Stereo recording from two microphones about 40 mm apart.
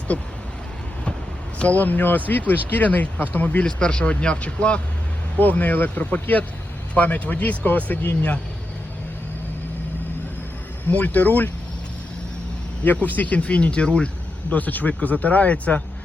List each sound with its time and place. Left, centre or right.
0.1 s speech: left
1.5 s speech: left
3.7 s speech: left
5.4 s speech: left
6.0 s speech: left
10.9 s speech: left
12.8 s speech: left
14.5 s speech: left